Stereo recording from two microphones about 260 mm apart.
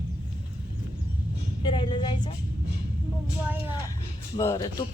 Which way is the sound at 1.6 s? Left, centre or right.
Centre.